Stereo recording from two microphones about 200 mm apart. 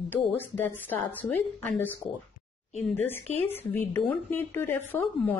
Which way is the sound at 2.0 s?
25° left (ahead or behind).